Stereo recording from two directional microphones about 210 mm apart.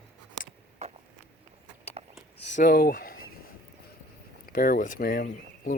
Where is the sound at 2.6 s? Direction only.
45° left (ahead or behind).